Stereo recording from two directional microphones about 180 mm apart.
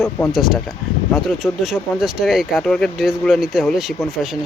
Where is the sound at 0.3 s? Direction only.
Centre (ahead or behind).